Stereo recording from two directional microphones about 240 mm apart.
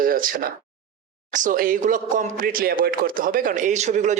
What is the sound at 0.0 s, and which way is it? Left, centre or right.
Speech, right.